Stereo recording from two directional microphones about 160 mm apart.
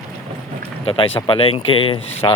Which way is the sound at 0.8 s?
35° left (ahead or behind).